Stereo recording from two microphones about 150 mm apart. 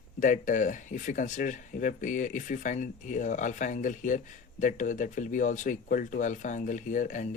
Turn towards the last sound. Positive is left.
turn(degrees=60)  # may be behind; listen again after turning